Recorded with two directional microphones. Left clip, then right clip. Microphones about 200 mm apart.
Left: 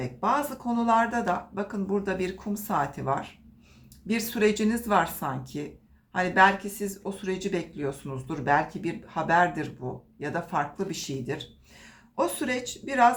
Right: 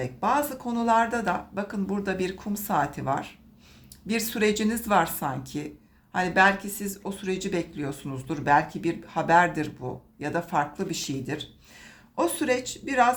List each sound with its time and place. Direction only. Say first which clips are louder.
0.0 s speech: right 1 dB; 25° right (ahead or behind)